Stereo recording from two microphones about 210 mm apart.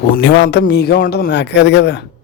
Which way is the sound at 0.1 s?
55° left (ahead or behind).